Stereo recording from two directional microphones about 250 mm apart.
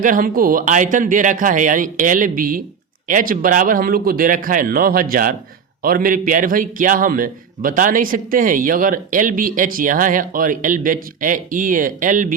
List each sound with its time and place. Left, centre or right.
0.0 s a man's voice: right